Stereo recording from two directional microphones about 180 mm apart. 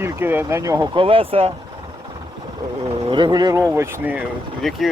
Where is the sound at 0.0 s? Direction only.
10° right (ahead or behind).